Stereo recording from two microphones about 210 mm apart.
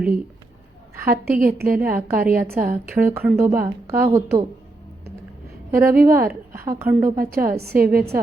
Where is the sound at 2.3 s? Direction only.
45° right (ahead or behind).